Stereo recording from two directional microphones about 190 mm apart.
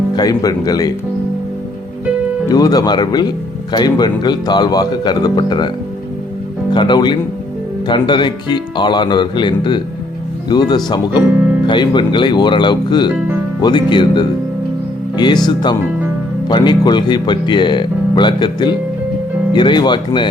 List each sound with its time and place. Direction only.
0.2 s speech: 20° left (ahead or behind)
2.5 s speech: 20° left (ahead or behind)